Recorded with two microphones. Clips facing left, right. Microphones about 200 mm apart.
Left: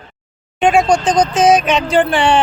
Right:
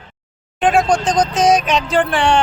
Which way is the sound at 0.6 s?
Centre (ahead or behind).